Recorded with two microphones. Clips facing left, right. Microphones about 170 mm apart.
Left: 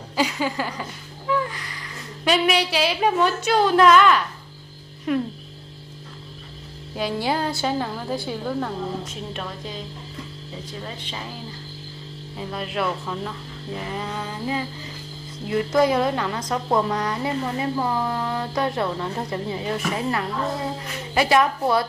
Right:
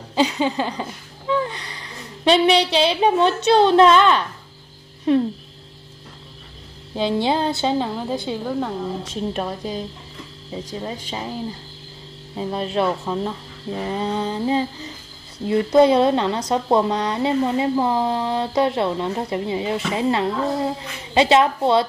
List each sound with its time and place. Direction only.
0.1 s a sound: 25° right (ahead or behind)
2.2 s speech: 30° right (ahead or behind)
7.0 s speech: 25° right (ahead or behind)
8.5 s a woman's voice: 10° right (ahead or behind)
9.1 s music: 35° right (ahead or behind)
12.4 s speech: 30° right (ahead or behind)